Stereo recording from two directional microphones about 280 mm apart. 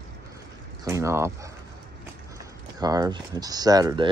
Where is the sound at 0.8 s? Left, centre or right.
Centre.